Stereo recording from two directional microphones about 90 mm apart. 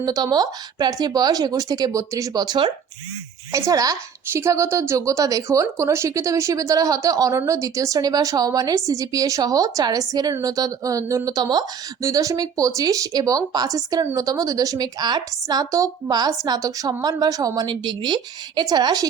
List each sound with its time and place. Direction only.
0.0 s a woman's voice: 45° right (ahead or behind)
3.5 s a woman's voice: 40° right (ahead or behind)
4.3 s a woman's voice: 30° right (ahead or behind)
11.3 s a woman's voice: 50° right (ahead or behind)
12.0 s a woman's voice: 35° right (ahead or behind)
17.7 s a woman's voice: 55° right (ahead or behind)